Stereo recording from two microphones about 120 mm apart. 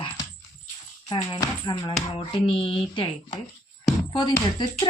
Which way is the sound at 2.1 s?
45° left (ahead or behind).